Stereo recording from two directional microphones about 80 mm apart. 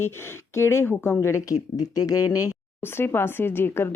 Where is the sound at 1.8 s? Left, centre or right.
Left.